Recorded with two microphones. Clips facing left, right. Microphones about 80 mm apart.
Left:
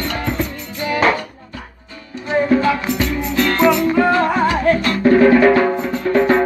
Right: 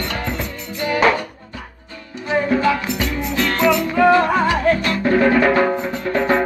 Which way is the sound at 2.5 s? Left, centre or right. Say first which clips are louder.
Left 2 dB; left.